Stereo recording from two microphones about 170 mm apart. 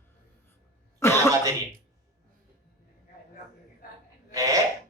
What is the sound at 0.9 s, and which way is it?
Cough, 15° left (ahead or behind).